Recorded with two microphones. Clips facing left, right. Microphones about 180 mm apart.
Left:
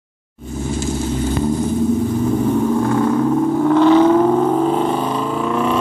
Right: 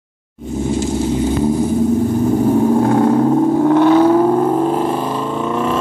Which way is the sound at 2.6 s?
40° right (ahead or behind).